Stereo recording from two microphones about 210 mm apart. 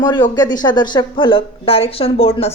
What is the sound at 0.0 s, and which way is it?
Speech, 20° left (ahead or behind).